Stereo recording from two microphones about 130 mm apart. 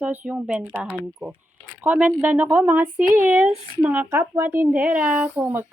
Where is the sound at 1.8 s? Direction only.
15° right (ahead or behind).